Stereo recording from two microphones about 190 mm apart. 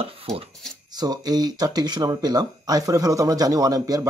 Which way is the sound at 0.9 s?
20° right (ahead or behind).